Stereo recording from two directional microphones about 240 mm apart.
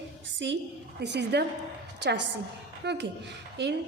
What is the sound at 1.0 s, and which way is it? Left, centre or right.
A woman's voice, right.